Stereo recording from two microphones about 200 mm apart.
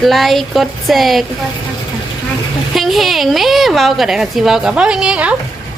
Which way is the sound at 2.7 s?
Centre (ahead or behind).